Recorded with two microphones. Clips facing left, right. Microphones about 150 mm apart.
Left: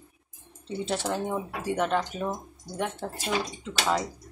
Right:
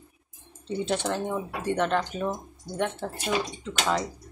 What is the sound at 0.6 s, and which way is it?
Speech, centre (ahead or behind).